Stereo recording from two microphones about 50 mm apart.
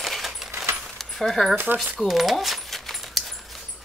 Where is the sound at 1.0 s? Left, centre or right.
Centre.